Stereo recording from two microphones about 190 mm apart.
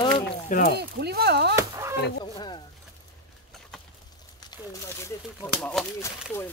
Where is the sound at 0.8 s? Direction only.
60° right (ahead or behind).